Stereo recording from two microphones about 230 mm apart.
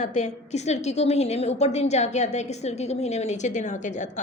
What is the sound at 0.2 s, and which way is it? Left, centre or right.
A woman's voice, left.